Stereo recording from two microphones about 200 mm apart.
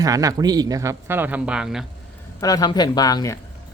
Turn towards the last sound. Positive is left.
turn(degrees=15)  # may be behind; listen again after turning